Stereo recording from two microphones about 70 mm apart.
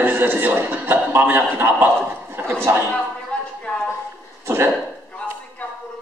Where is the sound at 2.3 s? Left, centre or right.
Right.